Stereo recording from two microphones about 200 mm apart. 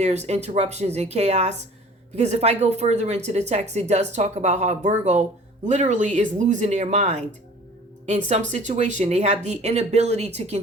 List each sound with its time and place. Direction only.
0.0 s speech: 35° right (ahead or behind)